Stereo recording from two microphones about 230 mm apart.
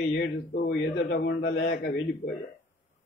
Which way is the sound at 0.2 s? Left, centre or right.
Left.